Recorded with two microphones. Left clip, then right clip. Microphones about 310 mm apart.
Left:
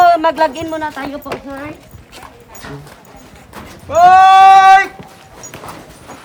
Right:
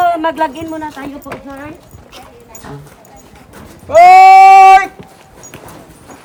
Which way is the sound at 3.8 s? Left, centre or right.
Right.